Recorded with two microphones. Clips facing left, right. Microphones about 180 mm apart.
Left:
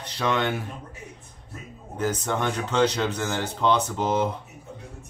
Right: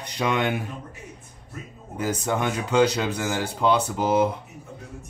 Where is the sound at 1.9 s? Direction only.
10° right (ahead or behind).